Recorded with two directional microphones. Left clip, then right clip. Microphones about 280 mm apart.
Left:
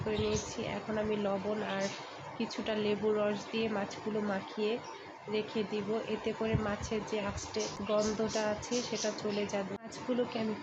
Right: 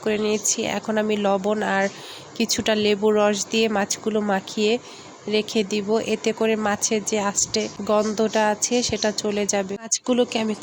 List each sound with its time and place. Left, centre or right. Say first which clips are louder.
0.1 s speech: right 12 dB; right